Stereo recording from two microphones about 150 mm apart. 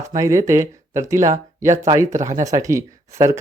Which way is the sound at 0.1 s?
20° right (ahead or behind).